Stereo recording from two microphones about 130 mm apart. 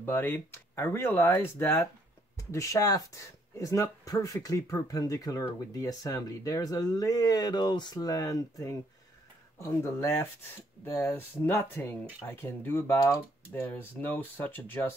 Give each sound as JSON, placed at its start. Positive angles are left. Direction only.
{"t": 0.0, "sound": "speech", "side_deg": 15}